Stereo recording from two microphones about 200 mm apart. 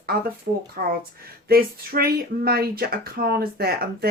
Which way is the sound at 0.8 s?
45° right (ahead or behind).